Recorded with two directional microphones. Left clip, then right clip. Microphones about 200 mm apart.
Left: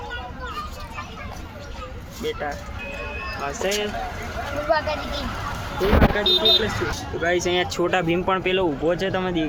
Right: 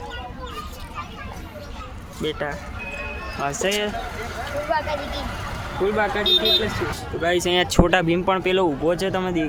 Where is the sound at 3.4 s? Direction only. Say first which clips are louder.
Right 2 dB; 55° right (ahead or behind).